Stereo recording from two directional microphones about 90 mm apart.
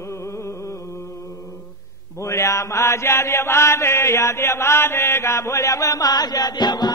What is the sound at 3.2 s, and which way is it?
Chant, 30° left (ahead or behind).